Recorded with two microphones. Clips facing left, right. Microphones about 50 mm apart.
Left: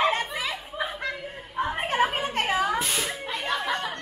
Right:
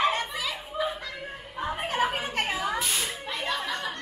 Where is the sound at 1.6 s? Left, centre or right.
Left.